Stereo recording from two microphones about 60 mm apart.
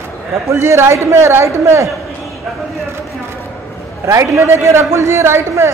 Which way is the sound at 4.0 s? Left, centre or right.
Right.